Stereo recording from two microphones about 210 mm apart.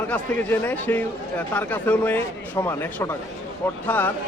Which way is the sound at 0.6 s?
10° left (ahead or behind).